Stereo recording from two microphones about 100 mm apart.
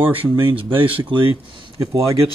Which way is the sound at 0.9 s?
60° right (ahead or behind).